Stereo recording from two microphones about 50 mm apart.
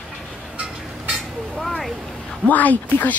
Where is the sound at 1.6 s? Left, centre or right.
Centre.